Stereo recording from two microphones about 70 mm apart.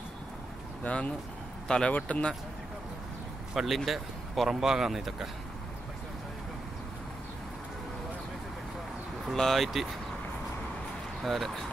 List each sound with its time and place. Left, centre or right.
0.8 s speech: centre
3.5 s speech: centre
9.3 s speech: centre
11.2 s speech: centre